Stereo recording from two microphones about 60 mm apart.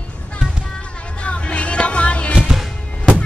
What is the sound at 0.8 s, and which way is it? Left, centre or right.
Music, centre.